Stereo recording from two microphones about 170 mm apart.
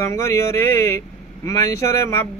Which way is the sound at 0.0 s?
20° left (ahead or behind).